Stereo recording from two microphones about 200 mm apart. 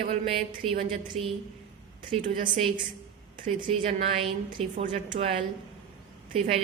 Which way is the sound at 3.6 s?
30° right (ahead or behind).